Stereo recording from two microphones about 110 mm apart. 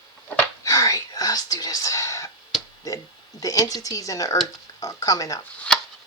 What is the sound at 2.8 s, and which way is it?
Speech, 30° left (ahead or behind).